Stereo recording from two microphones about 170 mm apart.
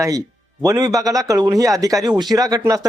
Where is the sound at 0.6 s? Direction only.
20° right (ahead or behind).